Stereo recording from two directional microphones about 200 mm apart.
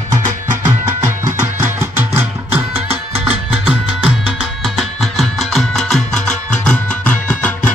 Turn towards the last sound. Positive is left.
turn(degrees=5)  # may be behind; listen again after turning